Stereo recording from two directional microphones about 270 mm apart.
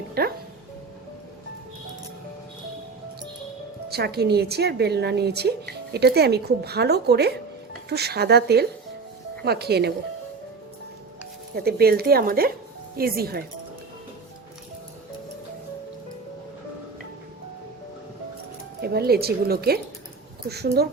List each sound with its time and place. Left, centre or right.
0.1 s music: right
3.8 s a woman's voice: right
11.5 s a woman's voice: right
18.8 s a woman's voice: right